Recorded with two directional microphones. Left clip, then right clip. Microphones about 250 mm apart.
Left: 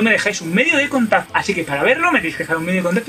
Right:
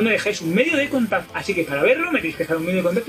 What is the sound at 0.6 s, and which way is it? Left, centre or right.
Speech, left.